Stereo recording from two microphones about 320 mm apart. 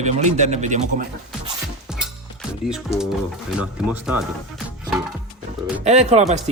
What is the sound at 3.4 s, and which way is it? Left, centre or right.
Speech, centre.